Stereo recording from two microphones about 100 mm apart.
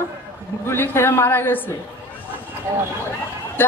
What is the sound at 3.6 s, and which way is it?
Speech, 20° left (ahead or behind).